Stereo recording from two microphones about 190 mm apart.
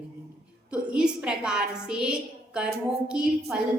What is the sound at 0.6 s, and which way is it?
A woman's voice, 5° right (ahead or behind).